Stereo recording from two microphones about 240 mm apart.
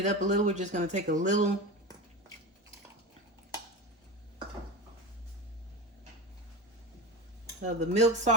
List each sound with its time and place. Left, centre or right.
0.0 s speech: right
7.6 s speech: right